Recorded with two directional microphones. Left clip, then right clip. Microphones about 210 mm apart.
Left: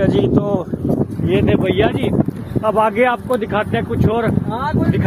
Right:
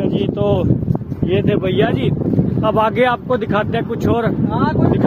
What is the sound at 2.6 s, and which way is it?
Speech, centre (ahead or behind).